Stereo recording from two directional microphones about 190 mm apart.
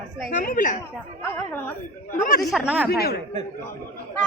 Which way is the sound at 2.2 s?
45° left (ahead or behind).